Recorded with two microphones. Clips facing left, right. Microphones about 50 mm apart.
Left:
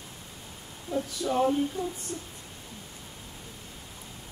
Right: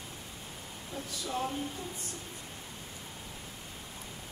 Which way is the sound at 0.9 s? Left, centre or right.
Left.